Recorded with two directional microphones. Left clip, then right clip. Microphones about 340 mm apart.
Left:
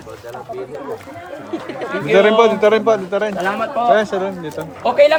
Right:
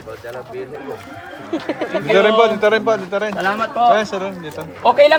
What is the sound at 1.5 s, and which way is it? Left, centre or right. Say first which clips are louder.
Speech: right 3 dB; centre.